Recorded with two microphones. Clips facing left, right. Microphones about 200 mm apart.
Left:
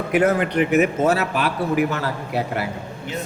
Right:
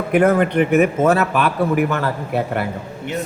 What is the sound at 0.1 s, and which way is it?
A man's voice, 50° right (ahead or behind).